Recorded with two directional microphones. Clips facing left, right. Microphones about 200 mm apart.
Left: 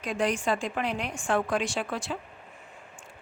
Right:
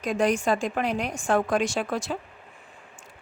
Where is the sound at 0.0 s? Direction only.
45° right (ahead or behind).